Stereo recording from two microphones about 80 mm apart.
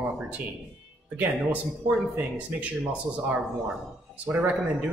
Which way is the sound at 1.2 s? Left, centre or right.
Right.